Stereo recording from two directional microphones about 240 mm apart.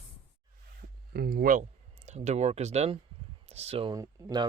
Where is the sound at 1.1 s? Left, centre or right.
Right.